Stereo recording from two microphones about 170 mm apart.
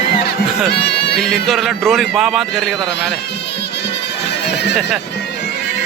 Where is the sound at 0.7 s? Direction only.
85° left.